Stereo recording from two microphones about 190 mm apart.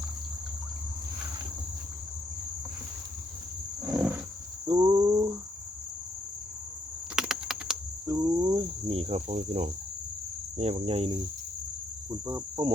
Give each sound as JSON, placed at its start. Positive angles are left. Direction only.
{"t": 3.8, "sound": "wild animals", "side_deg": -5}
{"t": 4.7, "sound": "cricket", "side_deg": -20}
{"t": 7.2, "sound": "typing", "side_deg": -5}
{"t": 8.0, "sound": "cricket", "side_deg": -20}
{"t": 12.2, "sound": "cricket", "side_deg": -20}